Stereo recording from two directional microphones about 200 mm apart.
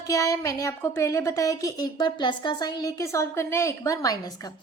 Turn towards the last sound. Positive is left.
turn(degrees=20)  # may be behind; listen again after turning